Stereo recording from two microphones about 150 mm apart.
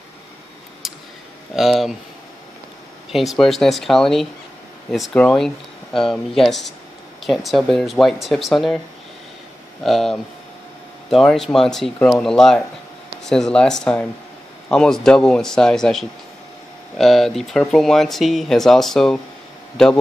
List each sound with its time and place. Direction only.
1.5 s speech: centre (ahead or behind)
3.1 s speech: centre (ahead or behind)
9.8 s speech: centre (ahead or behind)